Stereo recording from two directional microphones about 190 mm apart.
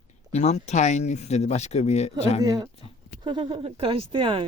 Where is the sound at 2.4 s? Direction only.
20° right (ahead or behind).